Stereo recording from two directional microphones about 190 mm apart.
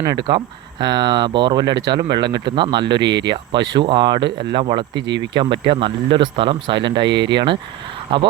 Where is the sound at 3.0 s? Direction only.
65° right (ahead or behind).